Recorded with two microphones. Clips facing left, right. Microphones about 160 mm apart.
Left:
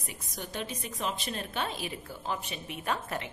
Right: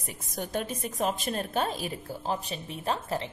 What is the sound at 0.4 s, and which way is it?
A woman's voice, 50° right (ahead or behind).